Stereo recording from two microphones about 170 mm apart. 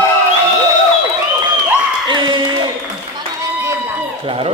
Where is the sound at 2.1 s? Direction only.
30° right (ahead or behind).